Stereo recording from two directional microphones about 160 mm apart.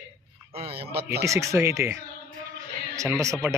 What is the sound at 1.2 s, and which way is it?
Speech, 20° right (ahead or behind).